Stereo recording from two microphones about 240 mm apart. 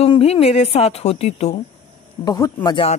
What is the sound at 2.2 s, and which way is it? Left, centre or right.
Speech, centre.